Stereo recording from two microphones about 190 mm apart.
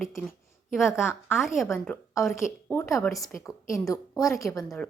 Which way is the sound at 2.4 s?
15° left (ahead or behind).